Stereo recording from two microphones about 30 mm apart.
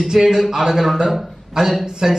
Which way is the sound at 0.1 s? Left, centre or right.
Centre.